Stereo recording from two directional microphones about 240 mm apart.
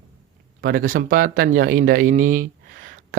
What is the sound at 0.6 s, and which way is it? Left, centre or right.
Speech, right.